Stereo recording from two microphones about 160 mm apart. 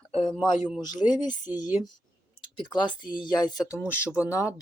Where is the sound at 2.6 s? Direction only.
30° left (ahead or behind).